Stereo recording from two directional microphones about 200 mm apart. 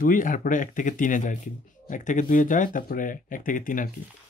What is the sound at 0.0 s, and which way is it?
Speech, 40° left (ahead or behind).